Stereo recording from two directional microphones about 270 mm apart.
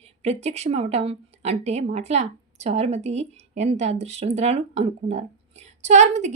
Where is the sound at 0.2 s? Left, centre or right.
Right.